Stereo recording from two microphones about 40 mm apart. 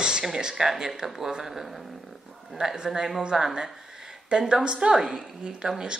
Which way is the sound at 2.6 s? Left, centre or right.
Centre.